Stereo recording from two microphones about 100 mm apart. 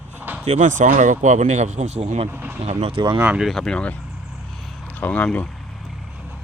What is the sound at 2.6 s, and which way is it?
Speech, 90° right.